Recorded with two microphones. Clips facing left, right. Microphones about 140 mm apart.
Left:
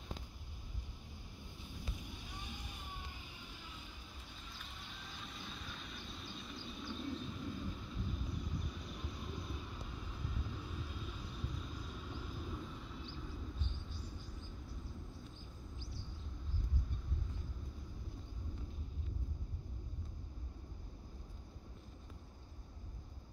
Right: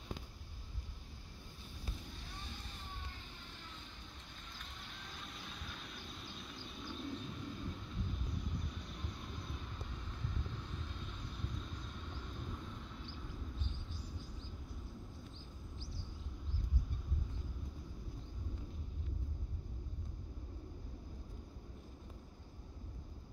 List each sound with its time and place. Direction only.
2.0 s vehicle: 15° left (ahead or behind)
4.6 s vehicle: centre (ahead or behind)
10.3 s vehicle: 5° left (ahead or behind)